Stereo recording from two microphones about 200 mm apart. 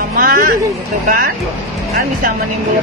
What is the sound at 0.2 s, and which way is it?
Music, 45° right (ahead or behind).